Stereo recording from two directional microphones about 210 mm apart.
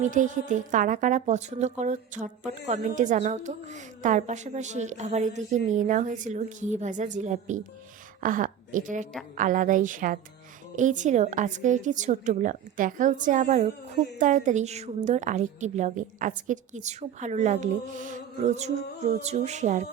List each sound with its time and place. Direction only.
0.0 s speech: 35° right (ahead or behind)